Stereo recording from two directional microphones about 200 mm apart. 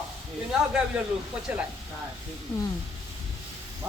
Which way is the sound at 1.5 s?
5° right (ahead or behind).